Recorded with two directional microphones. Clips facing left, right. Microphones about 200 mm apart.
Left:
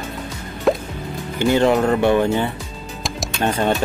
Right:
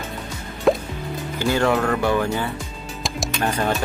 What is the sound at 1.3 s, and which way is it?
Speech, 20° left (ahead or behind).